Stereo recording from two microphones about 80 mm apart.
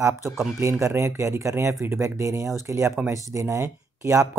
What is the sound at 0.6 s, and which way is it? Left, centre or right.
Speech, right.